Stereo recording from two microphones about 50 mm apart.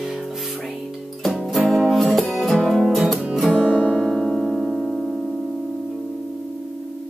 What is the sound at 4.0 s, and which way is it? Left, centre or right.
Music, centre.